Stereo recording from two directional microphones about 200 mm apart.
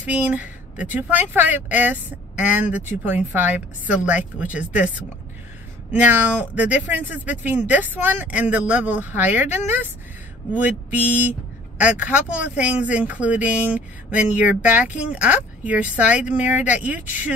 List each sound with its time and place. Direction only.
0.0 s speech: 10° right (ahead or behind)